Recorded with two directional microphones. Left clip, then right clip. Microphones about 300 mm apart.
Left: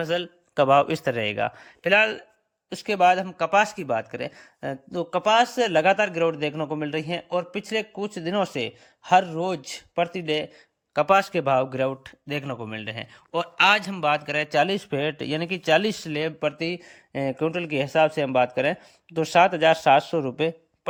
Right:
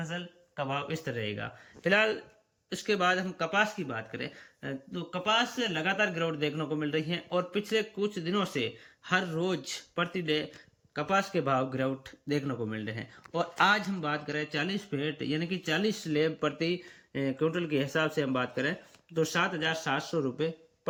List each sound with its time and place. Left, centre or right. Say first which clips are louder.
0.7 s speech: left 15 dB; centre